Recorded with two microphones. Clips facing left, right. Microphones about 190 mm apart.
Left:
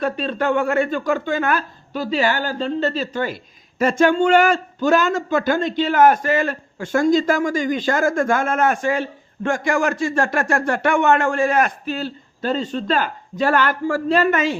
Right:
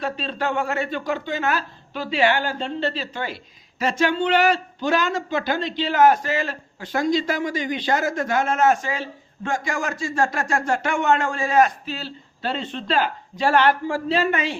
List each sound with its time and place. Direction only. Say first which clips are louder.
0.0 s speech: left 5 dB; 50° left (ahead or behind)